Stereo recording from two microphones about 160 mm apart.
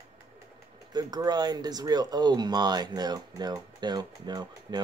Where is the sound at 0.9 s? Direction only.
25° right (ahead or behind).